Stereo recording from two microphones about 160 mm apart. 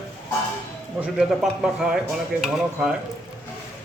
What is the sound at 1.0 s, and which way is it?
Speech, centre (ahead or behind).